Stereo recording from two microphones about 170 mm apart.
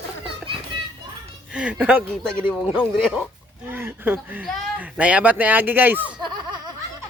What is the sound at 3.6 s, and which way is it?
Speech, 10° right (ahead or behind).